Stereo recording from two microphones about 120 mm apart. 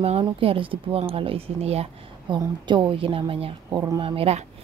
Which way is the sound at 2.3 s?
40° right (ahead or behind).